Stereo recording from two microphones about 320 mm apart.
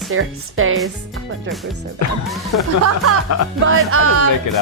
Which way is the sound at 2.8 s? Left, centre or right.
Right.